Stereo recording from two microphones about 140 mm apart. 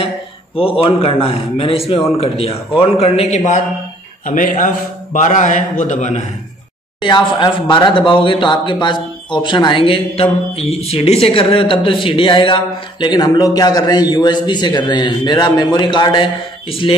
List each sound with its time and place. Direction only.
0.6 s a man's voice: 40° left (ahead or behind)
4.3 s a man's voice: 70° left (ahead or behind)
7.0 s speech: 35° left (ahead or behind)